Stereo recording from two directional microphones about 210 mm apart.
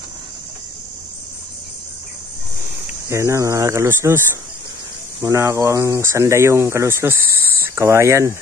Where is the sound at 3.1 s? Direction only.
15° right (ahead or behind).